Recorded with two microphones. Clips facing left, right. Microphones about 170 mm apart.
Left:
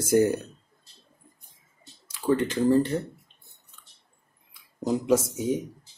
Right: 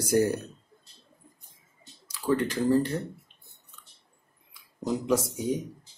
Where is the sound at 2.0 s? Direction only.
25° left (ahead or behind).